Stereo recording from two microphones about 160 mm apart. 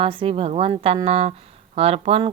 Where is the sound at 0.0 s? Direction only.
35° right (ahead or behind).